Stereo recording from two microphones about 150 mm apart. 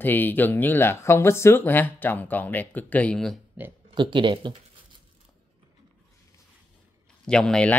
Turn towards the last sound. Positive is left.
turn(degrees=5)  # may be behind; listen again after turning